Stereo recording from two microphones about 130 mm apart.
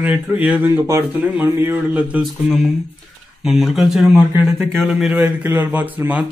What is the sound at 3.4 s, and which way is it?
Speech, centre (ahead or behind).